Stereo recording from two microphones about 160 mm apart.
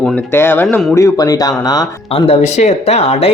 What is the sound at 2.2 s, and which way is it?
Speech, 45° left (ahead or behind).